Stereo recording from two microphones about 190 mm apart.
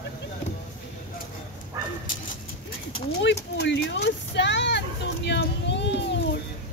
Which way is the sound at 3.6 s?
70° left (ahead or behind).